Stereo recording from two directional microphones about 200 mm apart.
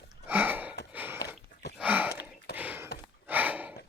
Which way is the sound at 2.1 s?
55° left (ahead or behind).